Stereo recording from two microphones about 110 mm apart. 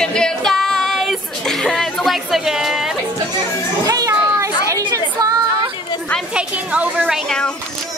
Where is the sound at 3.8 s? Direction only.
30° right (ahead or behind).